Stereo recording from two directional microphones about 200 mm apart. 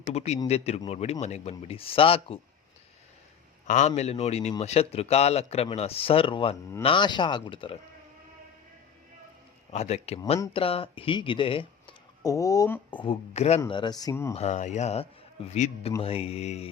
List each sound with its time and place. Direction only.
0.0 s a man's voice: 30° left (ahead or behind)
3.7 s a man's voice: 35° left (ahead or behind)
9.7 s speech: 35° left (ahead or behind); by 12.8 s 15° left (ahead or behind)
12.9 s a man's voice: 25° left (ahead or behind)
14.3 s speech: 35° left (ahead or behind)